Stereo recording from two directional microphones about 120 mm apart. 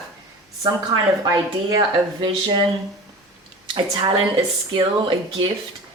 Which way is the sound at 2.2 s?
40° right (ahead or behind).